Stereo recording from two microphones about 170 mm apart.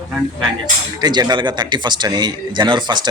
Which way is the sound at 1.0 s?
25° right (ahead or behind).